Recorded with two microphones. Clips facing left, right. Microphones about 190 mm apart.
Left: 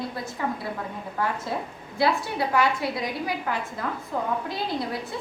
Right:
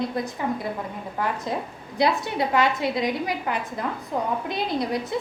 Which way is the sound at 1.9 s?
20° right (ahead or behind).